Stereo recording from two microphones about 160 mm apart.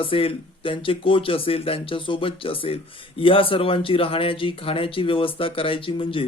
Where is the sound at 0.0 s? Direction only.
35° left (ahead or behind).